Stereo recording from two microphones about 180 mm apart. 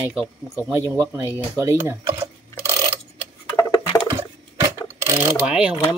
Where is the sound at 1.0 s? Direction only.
10° left (ahead or behind).